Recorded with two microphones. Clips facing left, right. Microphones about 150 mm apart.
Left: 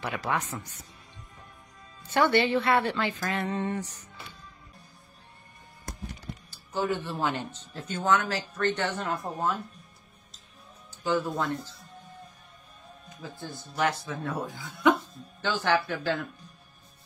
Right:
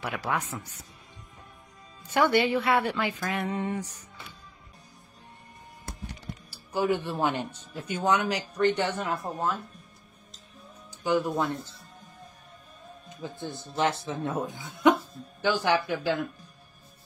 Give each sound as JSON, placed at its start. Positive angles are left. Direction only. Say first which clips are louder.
{"t": 0.0, "sound": "speech", "louder": "even", "side_deg": -10}
{"t": 2.0, "sound": "speech", "louder": "even", "side_deg": -10}
{"t": 6.5, "sound": "speech", "louder": "right 3 dB", "side_deg": -10}
{"t": 11.1, "sound": "speech", "louder": "right 2 dB", "side_deg": -15}
{"t": 13.2, "sound": "speech", "louder": "right 4 dB", "side_deg": -20}